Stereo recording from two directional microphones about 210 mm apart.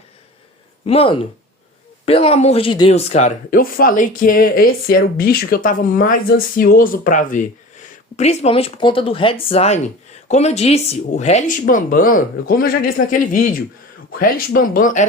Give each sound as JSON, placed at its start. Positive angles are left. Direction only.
{"t": 0.9, "sound": "speech", "side_deg": 25}